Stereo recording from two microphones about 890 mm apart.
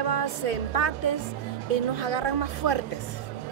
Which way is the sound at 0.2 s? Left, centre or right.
Left.